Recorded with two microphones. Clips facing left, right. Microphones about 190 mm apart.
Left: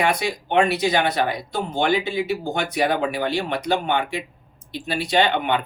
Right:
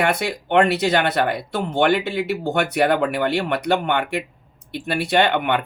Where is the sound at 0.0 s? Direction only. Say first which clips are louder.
Right 1 dB; 60° right (ahead or behind).